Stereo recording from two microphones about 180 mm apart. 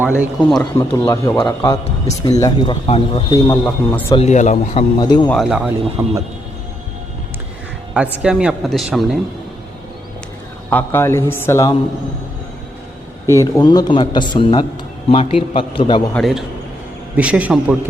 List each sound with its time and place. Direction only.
0.0 s speech: 5° right (ahead or behind)
0.6 s a man's voice: 15° left (ahead or behind)
3.6 s speech: 5° left (ahead or behind)
4.1 s a man's voice: 35° left (ahead or behind)
4.9 s a man's voice: 25° left (ahead or behind)
5.3 s speech: centre (ahead or behind)
6.0 s speech: 15° right (ahead or behind)
8.2 s speech: 5° right (ahead or behind)
10.7 s a man's voice: 10° left (ahead or behind)
13.2 s a man's voice: 15° left (ahead or behind)
16.1 s speech: centre (ahead or behind)